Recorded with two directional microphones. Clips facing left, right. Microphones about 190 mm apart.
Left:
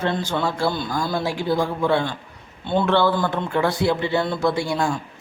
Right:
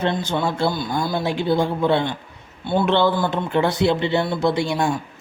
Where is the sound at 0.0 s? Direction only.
20° right (ahead or behind).